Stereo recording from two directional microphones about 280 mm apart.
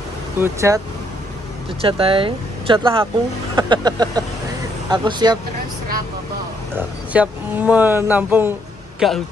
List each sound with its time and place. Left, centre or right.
0.4 s speech: centre
1.8 s speech: centre
7.1 s a man's voice: centre